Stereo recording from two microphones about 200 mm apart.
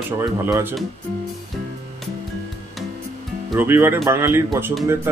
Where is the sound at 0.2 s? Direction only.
15° right (ahead or behind).